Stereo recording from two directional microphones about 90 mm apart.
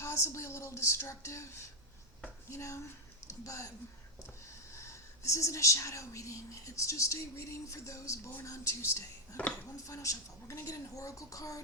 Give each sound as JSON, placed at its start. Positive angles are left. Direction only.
{"t": 0.0, "sound": "speech", "side_deg": 35}
{"t": 2.5, "sound": "speech", "side_deg": 35}
{"t": 4.8, "sound": "speech", "side_deg": 35}